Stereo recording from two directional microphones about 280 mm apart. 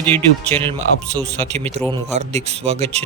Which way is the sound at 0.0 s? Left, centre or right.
Centre.